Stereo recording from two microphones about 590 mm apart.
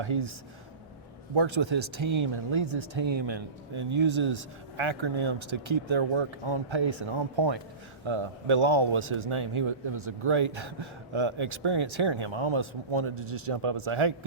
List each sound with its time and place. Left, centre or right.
0.0 s speech: right
1.4 s speech: right